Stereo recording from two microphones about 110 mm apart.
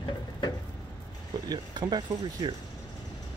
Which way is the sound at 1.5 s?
40° right (ahead or behind).